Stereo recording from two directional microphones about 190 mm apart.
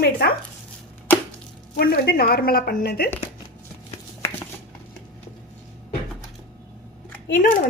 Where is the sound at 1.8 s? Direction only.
55° left (ahead or behind).